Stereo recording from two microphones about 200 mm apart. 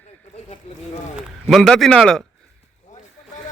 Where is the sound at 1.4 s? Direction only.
Centre (ahead or behind).